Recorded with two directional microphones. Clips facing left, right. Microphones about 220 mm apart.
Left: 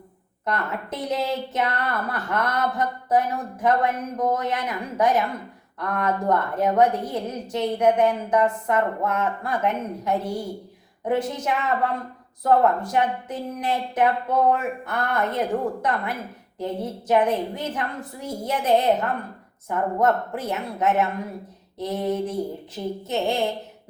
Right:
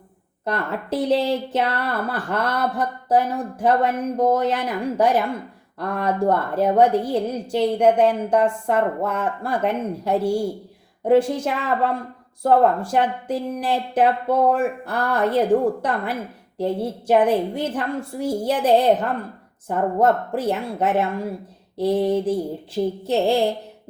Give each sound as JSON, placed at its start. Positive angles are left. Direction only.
{"t": 0.4, "sound": "a woman's voice", "side_deg": -30}